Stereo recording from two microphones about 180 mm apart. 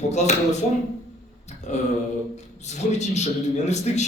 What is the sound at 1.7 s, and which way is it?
Speech, 40° left (ahead or behind).